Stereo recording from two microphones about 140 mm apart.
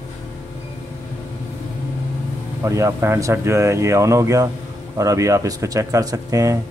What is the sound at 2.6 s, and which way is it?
Speech, 20° right (ahead or behind).